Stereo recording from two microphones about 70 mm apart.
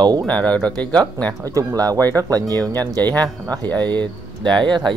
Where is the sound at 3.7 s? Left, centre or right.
Right.